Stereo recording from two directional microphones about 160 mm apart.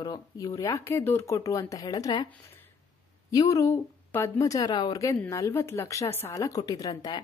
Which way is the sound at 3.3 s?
20° left (ahead or behind).